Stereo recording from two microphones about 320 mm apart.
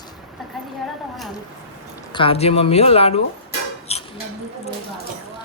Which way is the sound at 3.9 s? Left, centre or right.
Centre.